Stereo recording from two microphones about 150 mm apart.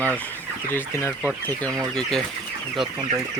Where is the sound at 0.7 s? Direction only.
15° left (ahead or behind).